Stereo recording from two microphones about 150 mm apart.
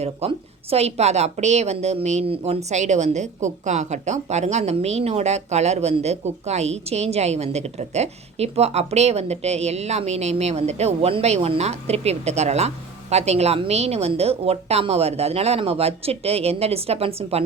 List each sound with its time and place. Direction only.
0.0 s a woman's voice: 40° right (ahead or behind)